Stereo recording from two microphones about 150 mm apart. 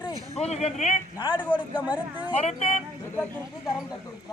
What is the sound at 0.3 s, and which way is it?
Speech, 45° left (ahead or behind).